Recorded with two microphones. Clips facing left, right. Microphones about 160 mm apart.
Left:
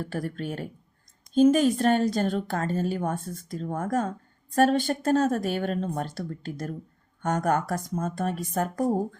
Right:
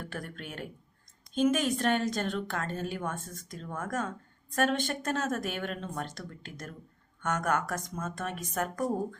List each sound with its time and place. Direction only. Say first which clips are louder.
0.0 s speech: left 9 dB; 35° left (ahead or behind)